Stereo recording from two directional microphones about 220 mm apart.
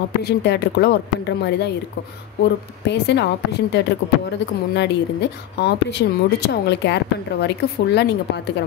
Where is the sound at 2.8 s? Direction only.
50° left (ahead or behind).